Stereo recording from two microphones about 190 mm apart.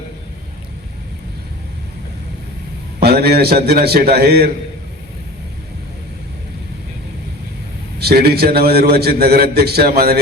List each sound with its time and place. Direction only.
3.0 s a man's voice: 55° right (ahead or behind)
7.9 s a man's voice: 55° right (ahead or behind)